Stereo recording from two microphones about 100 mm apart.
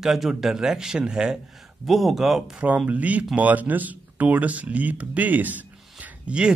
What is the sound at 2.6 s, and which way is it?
Speech, 15° right (ahead or behind).